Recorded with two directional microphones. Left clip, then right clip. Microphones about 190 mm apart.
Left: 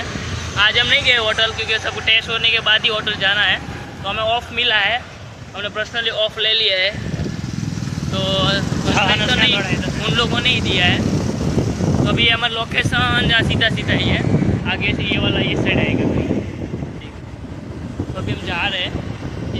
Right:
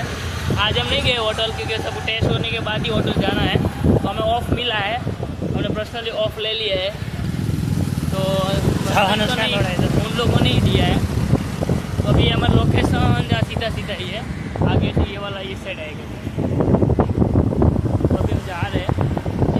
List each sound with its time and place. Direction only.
0.5 s speech: centre (ahead or behind)
6.1 s speech: centre (ahead or behind)
8.2 s speech: 5° right (ahead or behind)
9.0 s speech: 35° right (ahead or behind)
10.2 s speech: centre (ahead or behind)
12.1 s speech: centre (ahead or behind)